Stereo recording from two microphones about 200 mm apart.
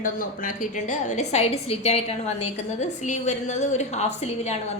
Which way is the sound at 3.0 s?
35° left (ahead or behind).